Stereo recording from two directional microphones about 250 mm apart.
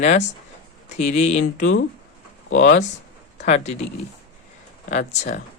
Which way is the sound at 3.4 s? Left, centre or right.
Left.